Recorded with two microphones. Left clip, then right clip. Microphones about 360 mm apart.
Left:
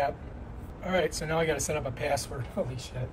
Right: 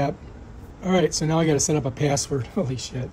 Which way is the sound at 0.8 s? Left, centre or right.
Centre.